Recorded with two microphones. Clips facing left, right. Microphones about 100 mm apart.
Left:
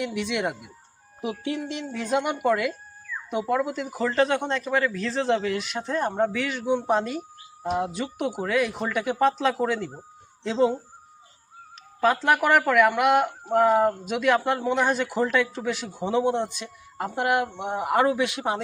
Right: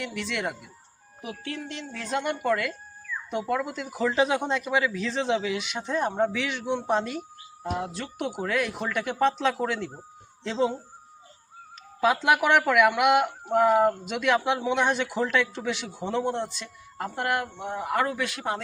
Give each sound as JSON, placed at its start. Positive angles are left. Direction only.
{"t": 0.0, "sound": "speech", "side_deg": 15}
{"t": 11.9, "sound": "speech", "side_deg": -5}